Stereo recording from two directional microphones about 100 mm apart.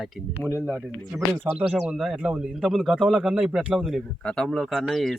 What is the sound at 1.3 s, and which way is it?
Speech, 15° right (ahead or behind).